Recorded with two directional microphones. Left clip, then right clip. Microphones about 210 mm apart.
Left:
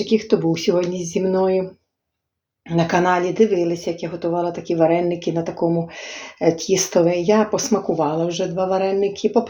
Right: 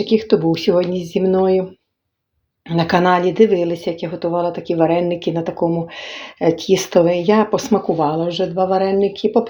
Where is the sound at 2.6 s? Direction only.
30° right (ahead or behind).